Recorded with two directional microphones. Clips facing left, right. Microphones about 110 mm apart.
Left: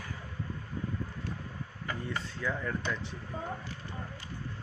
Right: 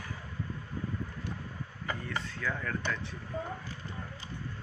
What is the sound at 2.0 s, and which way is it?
Speech, 15° left (ahead or behind).